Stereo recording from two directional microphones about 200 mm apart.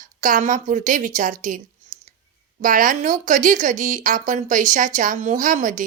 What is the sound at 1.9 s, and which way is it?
Clicking, 40° right (ahead or behind).